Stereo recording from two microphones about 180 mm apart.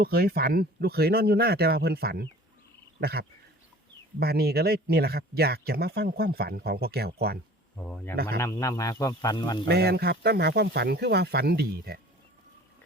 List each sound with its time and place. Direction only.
0.0 s speech: 60° right (ahead or behind)
7.9 s speech: 10° left (ahead or behind)
8.1 s speech: 60° right (ahead or behind)
8.4 s speech: 15° left (ahead or behind)
9.6 s speech: 65° right (ahead or behind)